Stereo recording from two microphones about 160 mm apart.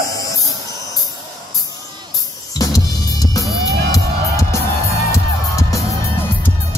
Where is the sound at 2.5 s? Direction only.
25° left (ahead or behind).